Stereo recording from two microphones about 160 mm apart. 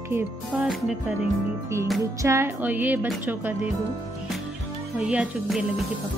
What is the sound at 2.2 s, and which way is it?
Speech, 15° right (ahead or behind).